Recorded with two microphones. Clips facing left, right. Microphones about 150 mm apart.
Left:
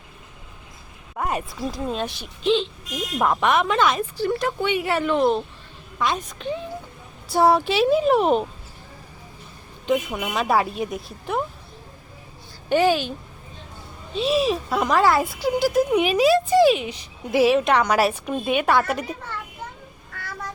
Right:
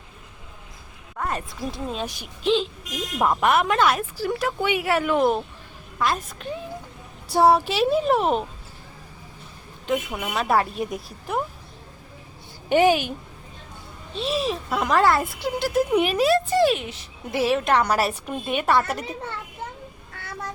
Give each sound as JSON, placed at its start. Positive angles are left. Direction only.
{"t": 1.1, "sound": "a woman's voice", "side_deg": 15}
{"t": 1.7, "sound": "speech", "side_deg": 0}
{"t": 9.8, "sound": "speech", "side_deg": 0}
{"t": 12.6, "sound": "speech", "side_deg": -15}
{"t": 14.1, "sound": "speech", "side_deg": 0}